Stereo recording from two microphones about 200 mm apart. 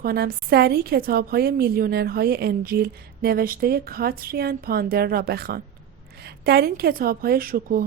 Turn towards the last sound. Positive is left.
turn(degrees=-45)  # may be behind; listen again after turning